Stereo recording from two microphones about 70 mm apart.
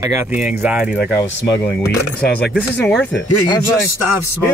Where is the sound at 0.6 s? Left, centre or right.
Centre.